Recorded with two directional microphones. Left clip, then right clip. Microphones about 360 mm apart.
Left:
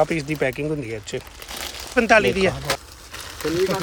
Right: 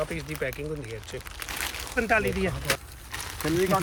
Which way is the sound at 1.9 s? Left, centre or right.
Centre.